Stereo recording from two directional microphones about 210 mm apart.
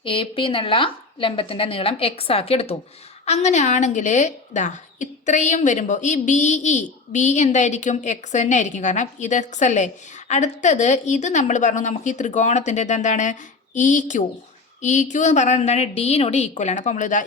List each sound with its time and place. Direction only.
0.0 s a woman's voice: 25° left (ahead or behind)